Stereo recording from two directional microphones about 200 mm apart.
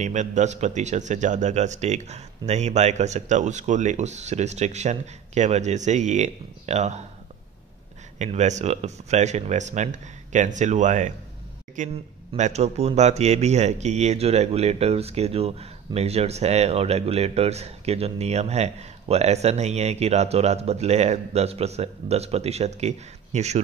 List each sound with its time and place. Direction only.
0.0 s speech: 35° right (ahead or behind)
8.2 s speech: 35° right (ahead or behind)